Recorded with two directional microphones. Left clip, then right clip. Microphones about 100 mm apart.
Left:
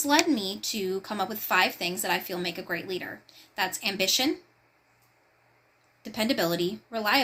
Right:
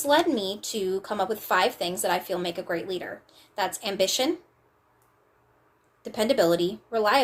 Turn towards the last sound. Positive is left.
turn(degrees=-40)  # may be behind; listen again after turning